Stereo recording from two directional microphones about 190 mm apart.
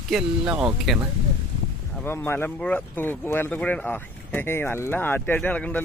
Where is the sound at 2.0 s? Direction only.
10° left (ahead or behind).